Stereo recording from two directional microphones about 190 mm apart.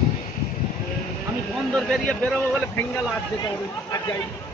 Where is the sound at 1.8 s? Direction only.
5° left (ahead or behind).